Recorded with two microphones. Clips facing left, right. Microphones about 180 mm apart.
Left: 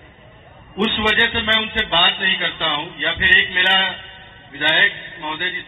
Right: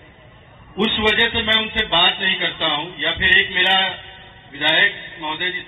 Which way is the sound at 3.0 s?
20° right (ahead or behind).